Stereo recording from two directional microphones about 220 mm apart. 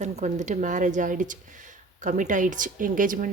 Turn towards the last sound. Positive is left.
turn(degrees=-35)  # may be behind; listen again after turning